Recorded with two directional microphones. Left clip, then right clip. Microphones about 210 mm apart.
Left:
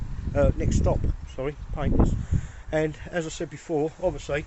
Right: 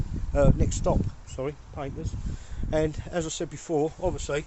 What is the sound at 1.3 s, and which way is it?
Speech, centre (ahead or behind).